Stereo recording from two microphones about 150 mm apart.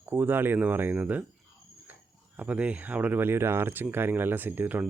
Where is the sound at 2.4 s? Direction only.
10° right (ahead or behind).